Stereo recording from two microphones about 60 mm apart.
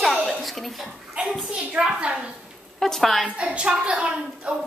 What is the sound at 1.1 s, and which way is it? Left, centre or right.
A woman's voice, centre.